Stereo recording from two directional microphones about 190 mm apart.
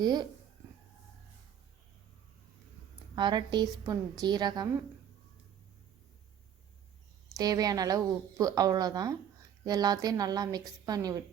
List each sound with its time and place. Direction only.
0.0 s a woman's voice: 20° right (ahead or behind)
3.2 s a woman's voice: 25° right (ahead or behind)
7.3 s a woman's voice: 20° right (ahead or behind)